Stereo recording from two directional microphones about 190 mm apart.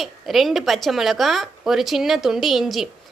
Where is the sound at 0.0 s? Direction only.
Centre (ahead or behind).